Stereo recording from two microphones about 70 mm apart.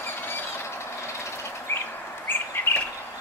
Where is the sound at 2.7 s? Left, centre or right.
Left.